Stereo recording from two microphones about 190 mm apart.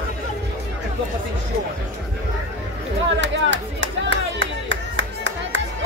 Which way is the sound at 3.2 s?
70° right (ahead or behind).